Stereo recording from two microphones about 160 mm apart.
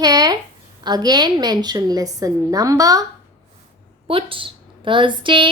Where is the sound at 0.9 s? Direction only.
25° right (ahead or behind).